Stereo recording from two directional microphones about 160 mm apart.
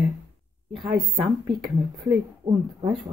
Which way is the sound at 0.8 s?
35° right (ahead or behind).